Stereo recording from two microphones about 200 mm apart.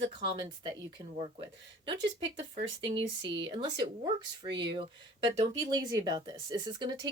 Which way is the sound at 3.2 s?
20° right (ahead or behind).